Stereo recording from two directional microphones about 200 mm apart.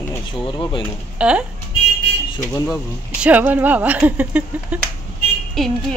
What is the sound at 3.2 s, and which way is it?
Speech, 10° right (ahead or behind).